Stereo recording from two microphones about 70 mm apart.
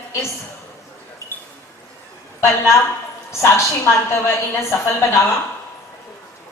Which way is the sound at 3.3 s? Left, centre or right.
Left.